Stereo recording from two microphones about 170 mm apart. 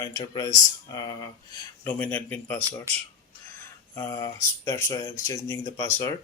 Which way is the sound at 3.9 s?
15° left (ahead or behind).